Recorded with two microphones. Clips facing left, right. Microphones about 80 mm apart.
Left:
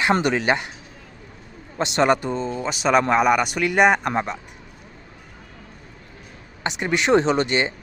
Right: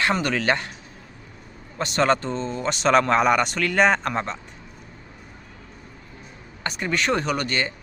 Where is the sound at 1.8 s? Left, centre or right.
Centre.